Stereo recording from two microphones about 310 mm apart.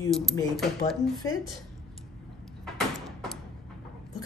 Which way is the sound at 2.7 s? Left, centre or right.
Centre.